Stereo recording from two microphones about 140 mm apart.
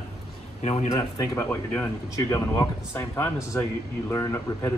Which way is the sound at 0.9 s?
25° left (ahead or behind).